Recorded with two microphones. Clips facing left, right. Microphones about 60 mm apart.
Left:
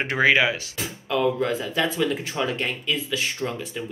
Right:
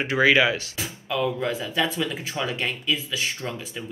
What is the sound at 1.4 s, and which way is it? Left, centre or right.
Speech, centre.